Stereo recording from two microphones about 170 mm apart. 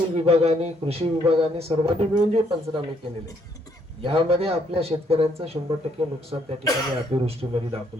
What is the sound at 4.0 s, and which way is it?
A man's voice, 35° right (ahead or behind).